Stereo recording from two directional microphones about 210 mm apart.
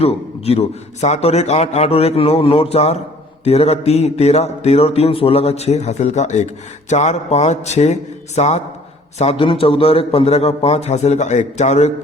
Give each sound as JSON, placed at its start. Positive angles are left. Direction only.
{"t": 0.0, "sound": "a man's voice", "side_deg": 30}